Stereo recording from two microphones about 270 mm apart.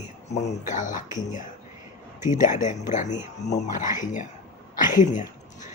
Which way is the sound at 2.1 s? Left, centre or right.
Left.